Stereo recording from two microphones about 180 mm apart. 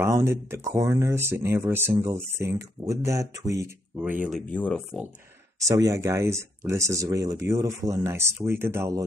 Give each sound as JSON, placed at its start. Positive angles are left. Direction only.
{"t": 0.0, "sound": "speech", "side_deg": -15}
{"t": 4.5, "sound": "speech", "side_deg": 5}
{"t": 5.7, "sound": "speech", "side_deg": -20}